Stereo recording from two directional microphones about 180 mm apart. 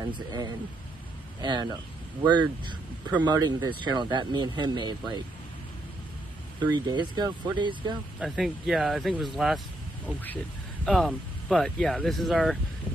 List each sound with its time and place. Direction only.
0.1 s speech: 20° right (ahead or behind)
6.6 s speech: 25° right (ahead or behind)
8.2 s speech: centre (ahead or behind)
10.9 s speech: centre (ahead or behind)